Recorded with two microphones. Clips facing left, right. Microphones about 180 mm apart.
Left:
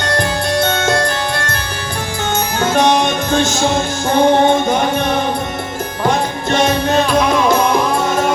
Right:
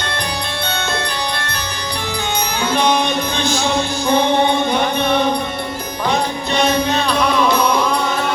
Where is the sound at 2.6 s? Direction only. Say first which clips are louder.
Left 3 dB; 45° left (ahead or behind).